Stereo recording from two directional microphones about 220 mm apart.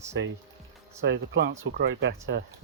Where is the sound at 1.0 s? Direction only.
50° right (ahead or behind).